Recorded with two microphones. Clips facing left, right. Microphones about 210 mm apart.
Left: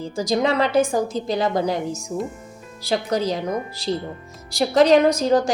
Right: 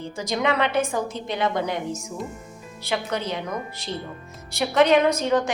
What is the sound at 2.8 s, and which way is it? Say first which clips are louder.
Speech: left 5 dB; 35° left (ahead or behind).